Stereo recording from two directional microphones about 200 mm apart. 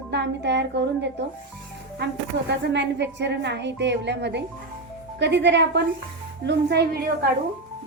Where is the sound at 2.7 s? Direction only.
60° right (ahead or behind).